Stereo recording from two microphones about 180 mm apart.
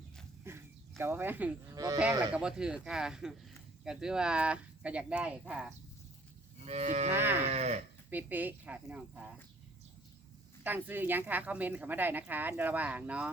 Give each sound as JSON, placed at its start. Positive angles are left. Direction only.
{"t": 0.4, "sound": "a sound", "side_deg": -15}
{"t": 1.7, "sound": "speech", "side_deg": -20}
{"t": 2.3, "sound": "speech", "side_deg": -5}
{"t": 6.6, "sound": "cattle", "side_deg": -35}
{"t": 7.1, "sound": "speech", "side_deg": -10}
{"t": 7.5, "sound": "speech", "side_deg": -40}
{"t": 8.1, "sound": "speech", "side_deg": -10}
{"t": 10.6, "sound": "speech", "side_deg": -10}